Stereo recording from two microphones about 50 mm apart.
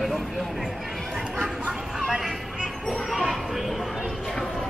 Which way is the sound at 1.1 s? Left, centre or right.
Centre.